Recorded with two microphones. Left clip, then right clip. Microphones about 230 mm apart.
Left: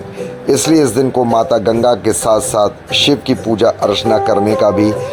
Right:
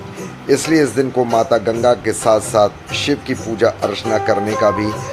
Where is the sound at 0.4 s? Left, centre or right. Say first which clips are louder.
Left 3 dB; left.